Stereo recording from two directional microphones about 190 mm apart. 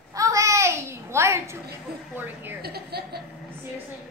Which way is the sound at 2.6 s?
55° right (ahead or behind).